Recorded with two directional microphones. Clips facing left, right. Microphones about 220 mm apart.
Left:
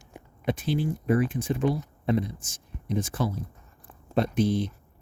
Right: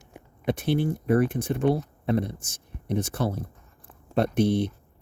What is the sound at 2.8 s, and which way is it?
Speech, 65° right (ahead or behind).